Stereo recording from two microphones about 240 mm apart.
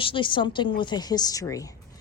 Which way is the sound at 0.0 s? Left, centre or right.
Left.